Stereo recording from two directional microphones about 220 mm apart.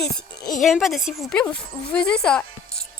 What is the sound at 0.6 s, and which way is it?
Speech, centre (ahead or behind).